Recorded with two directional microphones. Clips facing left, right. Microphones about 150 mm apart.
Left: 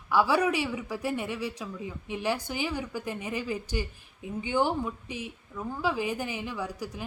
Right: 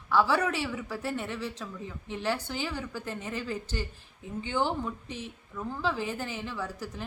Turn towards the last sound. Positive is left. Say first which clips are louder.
# left 2 dB
turn(degrees=10)  # may be behind; listen again after turning